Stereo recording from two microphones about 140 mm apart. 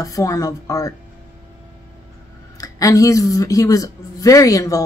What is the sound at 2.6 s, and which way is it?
Speech, 25° left (ahead or behind).